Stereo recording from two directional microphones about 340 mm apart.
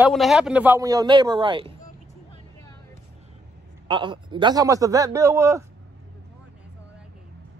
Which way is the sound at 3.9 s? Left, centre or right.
Centre.